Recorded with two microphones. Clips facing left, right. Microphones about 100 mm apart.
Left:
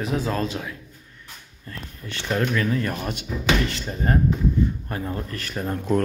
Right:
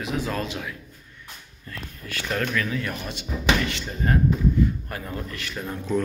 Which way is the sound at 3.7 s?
35° left (ahead or behind).